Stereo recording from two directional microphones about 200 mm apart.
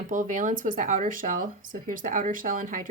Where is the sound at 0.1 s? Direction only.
40° right (ahead or behind).